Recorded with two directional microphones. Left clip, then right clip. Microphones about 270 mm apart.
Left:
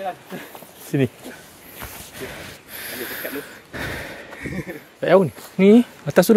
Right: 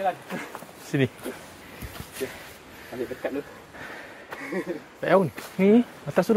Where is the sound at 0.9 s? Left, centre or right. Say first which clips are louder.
Left 4 dB; left.